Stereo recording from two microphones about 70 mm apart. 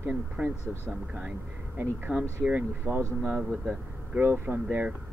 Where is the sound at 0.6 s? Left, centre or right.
Left.